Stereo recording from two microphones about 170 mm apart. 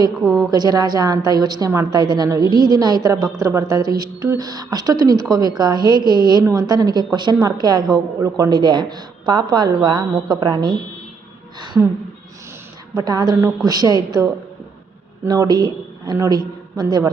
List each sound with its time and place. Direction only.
0.2 s a woman's voice: centre (ahead or behind)
0.5 s a woman's voice: 25° right (ahead or behind)
13.0 s a woman's voice: 25° right (ahead or behind)